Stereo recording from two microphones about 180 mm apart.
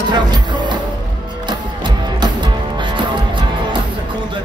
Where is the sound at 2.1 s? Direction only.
25° right (ahead or behind).